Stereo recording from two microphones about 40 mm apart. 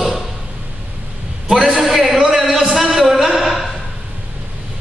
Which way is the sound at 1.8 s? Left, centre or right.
Centre.